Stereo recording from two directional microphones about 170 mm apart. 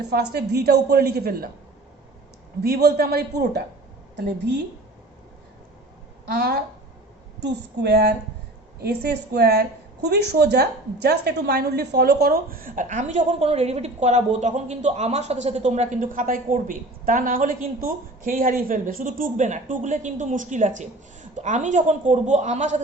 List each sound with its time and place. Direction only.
0.0 s a woman's voice: 75° right (ahead or behind)
2.6 s a woman's voice: 70° right (ahead or behind)
6.2 s speech: 65° right (ahead or behind)
7.3 s a woman's voice: 80° right; by 22.8 s 45° right (ahead or behind)